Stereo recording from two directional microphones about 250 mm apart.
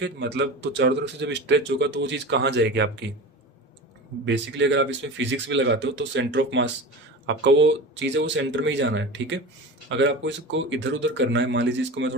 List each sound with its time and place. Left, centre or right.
0.0 s speech: right
4.3 s speech: right